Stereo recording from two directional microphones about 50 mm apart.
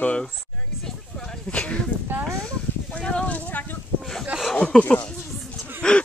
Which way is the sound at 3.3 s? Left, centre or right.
Left.